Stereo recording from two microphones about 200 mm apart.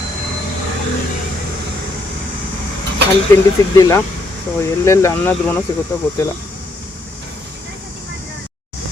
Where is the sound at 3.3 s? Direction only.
15° left (ahead or behind).